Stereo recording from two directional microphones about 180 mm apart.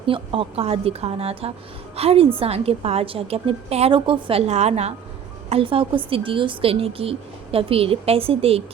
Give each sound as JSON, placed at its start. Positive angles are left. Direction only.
{"t": 0.0, "sound": "a woman's voice", "side_deg": -30}